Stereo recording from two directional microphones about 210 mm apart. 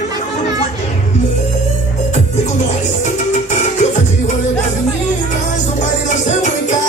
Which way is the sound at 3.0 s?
35° left (ahead or behind).